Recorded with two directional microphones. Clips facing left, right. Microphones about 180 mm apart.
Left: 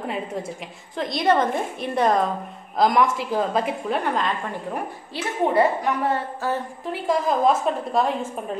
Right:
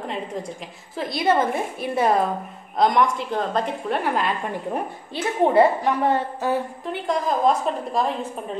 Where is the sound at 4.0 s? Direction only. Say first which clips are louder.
Right 1 dB; 5° right (ahead or behind).